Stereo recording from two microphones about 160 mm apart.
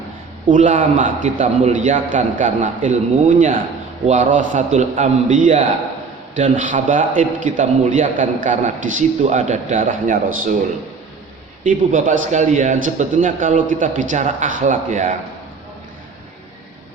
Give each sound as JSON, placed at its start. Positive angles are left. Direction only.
{"t": 0.4, "sound": "a man's voice", "side_deg": -50}
{"t": 11.6, "sound": "a man's voice", "side_deg": -55}